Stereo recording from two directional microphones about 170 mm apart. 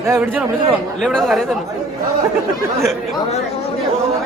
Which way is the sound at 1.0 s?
Centre (ahead or behind).